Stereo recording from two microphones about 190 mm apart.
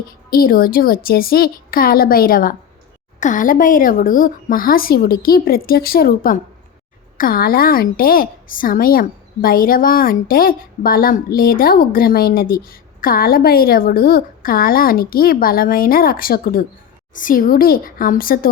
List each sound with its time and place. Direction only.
0.3 s a woman's voice: 50° left (ahead or behind)